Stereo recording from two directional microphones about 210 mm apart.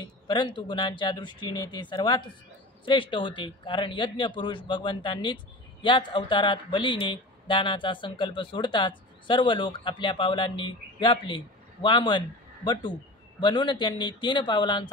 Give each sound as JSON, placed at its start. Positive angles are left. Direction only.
{"t": 0.3, "sound": "a man's voice", "side_deg": 20}
{"t": 13.4, "sound": "a man's voice", "side_deg": 20}